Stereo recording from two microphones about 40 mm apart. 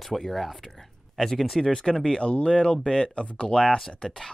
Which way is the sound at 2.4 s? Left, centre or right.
Left.